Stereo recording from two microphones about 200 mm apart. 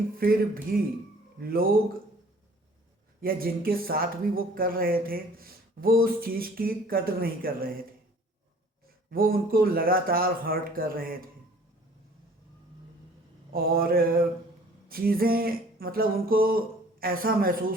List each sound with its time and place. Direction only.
0.2 s speech: 45° right (ahead or behind)
3.2 s speech: 45° right (ahead or behind)
9.0 s speech: 50° right (ahead or behind)
13.5 s speech: 50° right (ahead or behind)